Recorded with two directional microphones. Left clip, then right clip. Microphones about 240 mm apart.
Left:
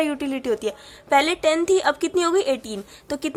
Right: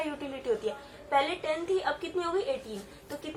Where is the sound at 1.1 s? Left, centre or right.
Left.